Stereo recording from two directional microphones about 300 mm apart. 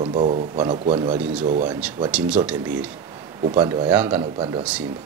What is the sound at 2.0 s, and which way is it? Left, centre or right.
Speech, centre.